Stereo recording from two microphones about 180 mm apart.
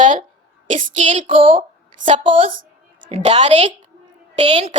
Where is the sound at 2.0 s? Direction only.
30° right (ahead or behind).